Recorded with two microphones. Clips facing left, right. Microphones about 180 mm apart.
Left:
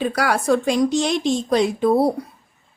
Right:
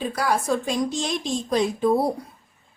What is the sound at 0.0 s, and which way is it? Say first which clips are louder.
A woman's voice: left 3 dB; 75° left (ahead or behind).